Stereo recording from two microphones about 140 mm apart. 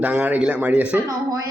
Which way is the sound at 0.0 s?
10° right (ahead or behind).